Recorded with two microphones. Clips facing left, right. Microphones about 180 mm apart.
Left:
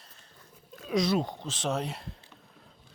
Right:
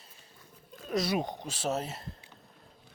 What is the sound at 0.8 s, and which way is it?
Speech, 5° right (ahead or behind).